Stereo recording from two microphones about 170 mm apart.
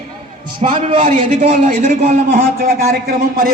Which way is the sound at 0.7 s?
30° right (ahead or behind).